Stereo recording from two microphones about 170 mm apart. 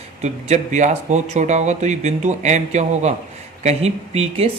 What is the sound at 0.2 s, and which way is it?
Speech, 40° right (ahead or behind).